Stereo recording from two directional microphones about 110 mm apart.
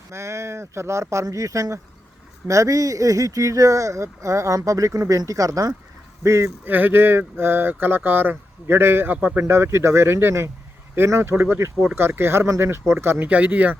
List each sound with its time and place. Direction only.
0.1 s speech: 25° right (ahead or behind)